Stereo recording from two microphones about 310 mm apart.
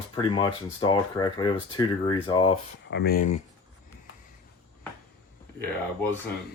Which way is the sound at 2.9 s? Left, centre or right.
Left.